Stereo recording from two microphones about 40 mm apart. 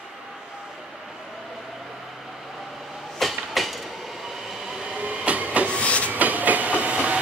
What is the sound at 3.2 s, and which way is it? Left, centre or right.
Train, centre.